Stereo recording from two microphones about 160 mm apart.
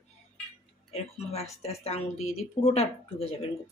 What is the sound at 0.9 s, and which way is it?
A woman's voice, 40° left (ahead or behind).